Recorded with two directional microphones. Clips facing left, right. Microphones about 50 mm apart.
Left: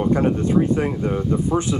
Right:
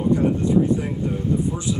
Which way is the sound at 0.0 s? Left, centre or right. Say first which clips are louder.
Left 1 dB; left.